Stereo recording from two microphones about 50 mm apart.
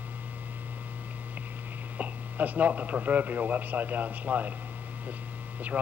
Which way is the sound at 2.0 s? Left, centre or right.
Right.